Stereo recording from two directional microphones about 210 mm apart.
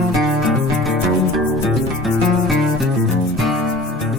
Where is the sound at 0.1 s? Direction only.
Centre (ahead or behind).